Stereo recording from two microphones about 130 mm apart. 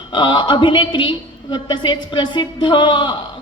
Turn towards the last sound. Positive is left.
turn(degrees=35)  # may be behind; listen again after turning